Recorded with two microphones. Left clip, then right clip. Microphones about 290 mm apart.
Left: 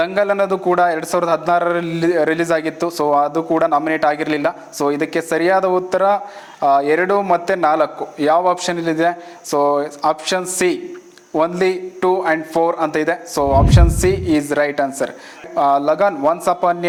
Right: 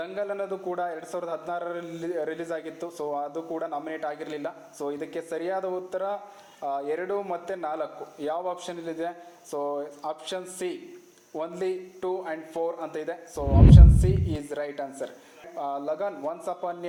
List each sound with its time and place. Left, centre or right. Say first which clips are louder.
0.0 s a man's voice: left 15 dB; left